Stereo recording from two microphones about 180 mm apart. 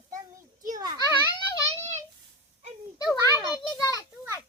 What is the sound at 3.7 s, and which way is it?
Children playing, 20° left (ahead or behind).